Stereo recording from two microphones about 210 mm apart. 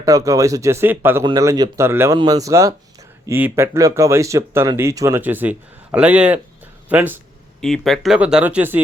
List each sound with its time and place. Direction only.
0.0 s speech: 15° right (ahead or behind)